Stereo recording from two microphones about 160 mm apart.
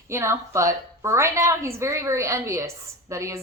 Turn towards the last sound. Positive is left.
turn(degrees=-20)  # may be behind; listen again after turning